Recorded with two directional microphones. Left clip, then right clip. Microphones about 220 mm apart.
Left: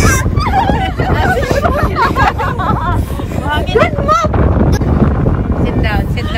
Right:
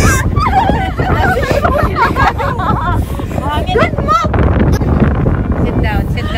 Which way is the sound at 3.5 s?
30° right (ahead or behind).